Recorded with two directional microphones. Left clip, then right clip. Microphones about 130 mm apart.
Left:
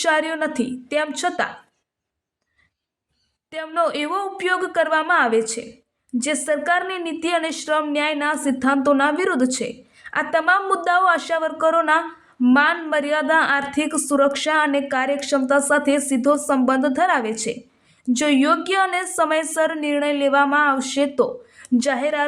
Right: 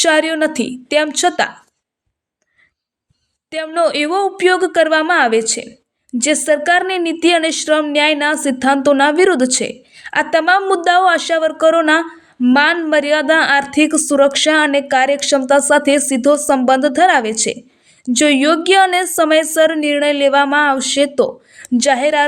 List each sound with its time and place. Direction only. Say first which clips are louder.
0.0 s a woman's voice: right 7 dB; 25° right (ahead or behind)
3.5 s a woman's voice: right 6 dB; 25° right (ahead or behind)